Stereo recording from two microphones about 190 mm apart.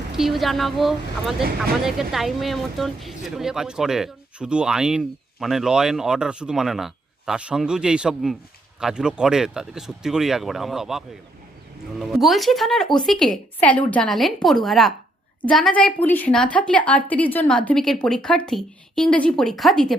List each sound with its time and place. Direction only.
0.2 s speech: centre (ahead or behind)
1.4 s speech: 50° right (ahead or behind)
1.8 s a woman's voice: centre (ahead or behind)